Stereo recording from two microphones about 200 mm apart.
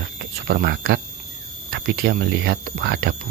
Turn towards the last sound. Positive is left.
turn(degrees=-55)  # may be behind; listen again after turning